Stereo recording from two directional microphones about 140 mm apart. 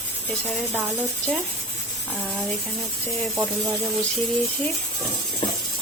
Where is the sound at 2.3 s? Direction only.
Centre (ahead or behind).